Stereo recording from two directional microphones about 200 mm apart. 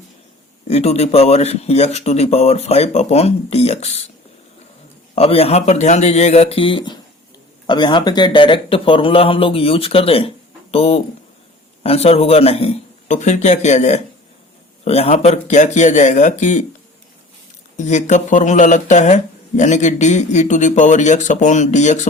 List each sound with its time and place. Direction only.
0.7 s speech: 30° left (ahead or behind)
5.1 s speech: 30° left (ahead or behind)
17.7 s speech: 35° left (ahead or behind)